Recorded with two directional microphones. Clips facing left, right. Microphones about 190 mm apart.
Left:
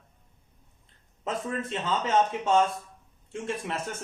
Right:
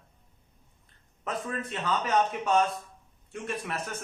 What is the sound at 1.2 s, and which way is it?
A man's voice, 25° left (ahead or behind).